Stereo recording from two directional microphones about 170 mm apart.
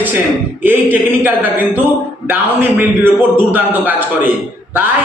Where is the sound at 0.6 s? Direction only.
10° right (ahead or behind).